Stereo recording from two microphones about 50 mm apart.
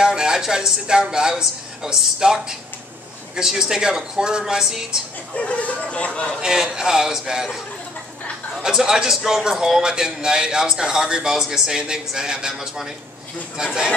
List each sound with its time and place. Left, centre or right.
0.0 s a man's voice: centre
5.3 s speech: left
6.4 s a man's voice: centre